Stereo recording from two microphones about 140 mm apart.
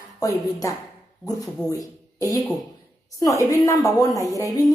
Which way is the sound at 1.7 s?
25° left (ahead or behind).